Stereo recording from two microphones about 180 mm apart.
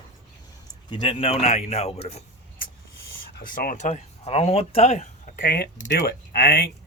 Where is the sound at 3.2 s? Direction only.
50° left (ahead or behind).